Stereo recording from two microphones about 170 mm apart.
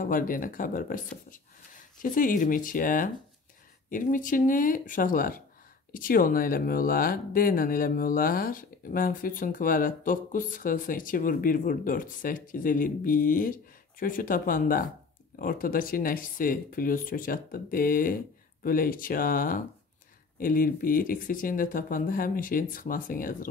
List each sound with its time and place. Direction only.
0.0 s speech: 55° left (ahead or behind)